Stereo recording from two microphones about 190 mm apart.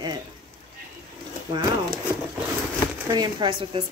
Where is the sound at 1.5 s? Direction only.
15° right (ahead or behind).